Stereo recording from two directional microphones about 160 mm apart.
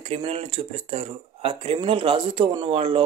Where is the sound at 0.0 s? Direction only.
40° right (ahead or behind).